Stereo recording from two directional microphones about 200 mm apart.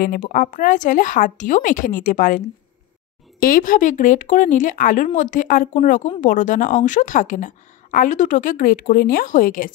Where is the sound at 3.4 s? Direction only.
45° left (ahead or behind).